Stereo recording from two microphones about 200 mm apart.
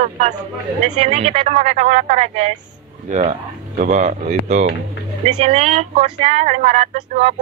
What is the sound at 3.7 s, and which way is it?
Speech, 40° right (ahead or behind).